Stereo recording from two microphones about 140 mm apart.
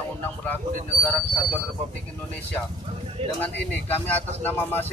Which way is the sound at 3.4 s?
10° left (ahead or behind).